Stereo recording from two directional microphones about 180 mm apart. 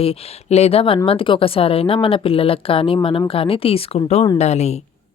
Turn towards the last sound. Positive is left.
turn(degrees=35)  # may be behind; listen again after turning